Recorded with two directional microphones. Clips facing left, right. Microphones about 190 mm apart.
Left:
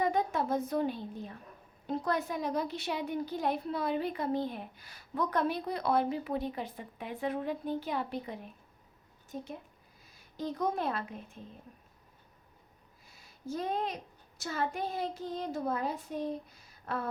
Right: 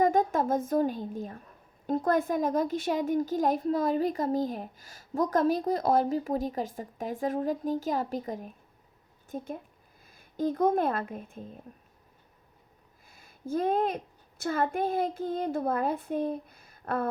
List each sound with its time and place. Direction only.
0.0 s a woman's voice: 45° right (ahead or behind)
13.1 s a child's voice: 50° right (ahead or behind)